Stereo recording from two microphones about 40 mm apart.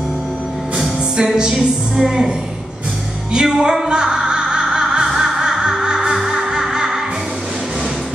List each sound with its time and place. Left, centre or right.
1.1 s music: centre
2.0 s speech: centre
3.3 s crow: centre
5.4 s caw: centre
5.8 s music: centre